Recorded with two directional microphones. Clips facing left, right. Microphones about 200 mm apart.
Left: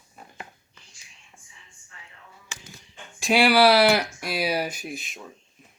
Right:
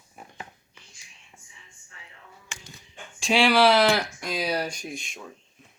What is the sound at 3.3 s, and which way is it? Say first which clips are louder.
Speech: left 2 dB; 10° left (ahead or behind).